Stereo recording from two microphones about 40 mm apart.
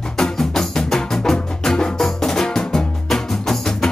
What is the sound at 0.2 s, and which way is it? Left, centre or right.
Music, centre.